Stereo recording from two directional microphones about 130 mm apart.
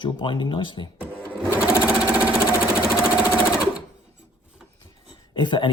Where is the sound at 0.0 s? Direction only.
35° left (ahead or behind).